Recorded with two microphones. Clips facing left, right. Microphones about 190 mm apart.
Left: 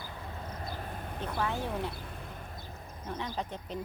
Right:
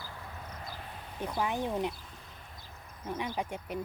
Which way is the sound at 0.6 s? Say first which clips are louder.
Left 5 dB; 50° left (ahead or behind).